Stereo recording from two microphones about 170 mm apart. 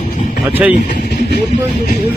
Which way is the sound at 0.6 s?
10° right (ahead or behind).